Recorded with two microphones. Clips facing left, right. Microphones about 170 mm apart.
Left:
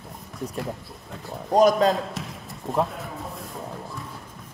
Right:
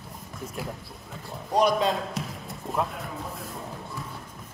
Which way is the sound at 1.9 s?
Centre (ahead or behind).